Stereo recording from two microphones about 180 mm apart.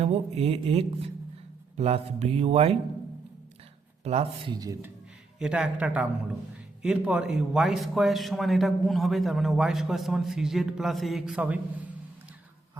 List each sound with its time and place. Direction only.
0.0 s a sound: 35° right (ahead or behind)
4.0 s speech: 35° right (ahead or behind)
5.4 s a man's voice: 5° right (ahead or behind)